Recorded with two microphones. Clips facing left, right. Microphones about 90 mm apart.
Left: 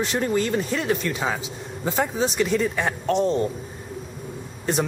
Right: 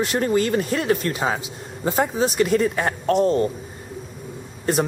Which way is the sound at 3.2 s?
Centre (ahead or behind).